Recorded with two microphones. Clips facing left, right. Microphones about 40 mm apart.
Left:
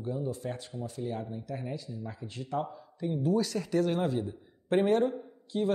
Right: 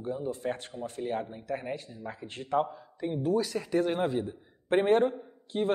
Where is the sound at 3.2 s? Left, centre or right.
Centre.